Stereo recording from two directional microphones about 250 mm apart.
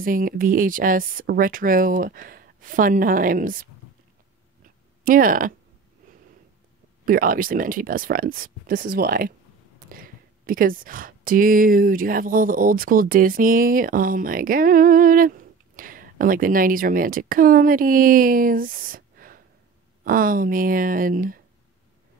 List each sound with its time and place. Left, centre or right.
0.0 s speech: right
5.0 s speech: right
7.1 s speech: right